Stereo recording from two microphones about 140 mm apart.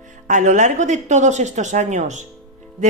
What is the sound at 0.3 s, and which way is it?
Speech, 60° right (ahead or behind).